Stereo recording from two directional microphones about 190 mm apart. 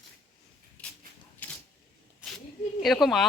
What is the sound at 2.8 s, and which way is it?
Speech, centre (ahead or behind).